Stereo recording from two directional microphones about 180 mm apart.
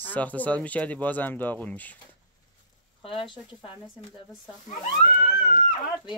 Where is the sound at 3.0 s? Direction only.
30° left (ahead or behind).